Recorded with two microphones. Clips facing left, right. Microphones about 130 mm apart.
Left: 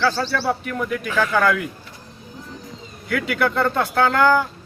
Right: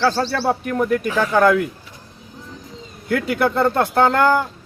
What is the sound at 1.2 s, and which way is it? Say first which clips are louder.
Speech: right 3 dB; 20° right (ahead or behind).